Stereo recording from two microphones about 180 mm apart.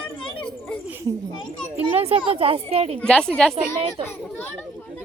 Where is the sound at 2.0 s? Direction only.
35° right (ahead or behind).